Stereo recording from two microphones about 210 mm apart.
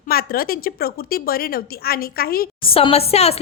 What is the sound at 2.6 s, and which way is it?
Speech, 25° left (ahead or behind).